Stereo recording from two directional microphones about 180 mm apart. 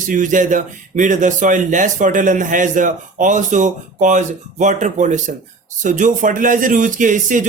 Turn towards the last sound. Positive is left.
turn(degrees=-45)  # may be behind; listen again after turning